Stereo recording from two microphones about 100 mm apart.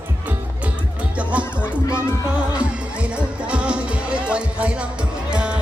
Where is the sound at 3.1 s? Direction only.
10° right (ahead or behind).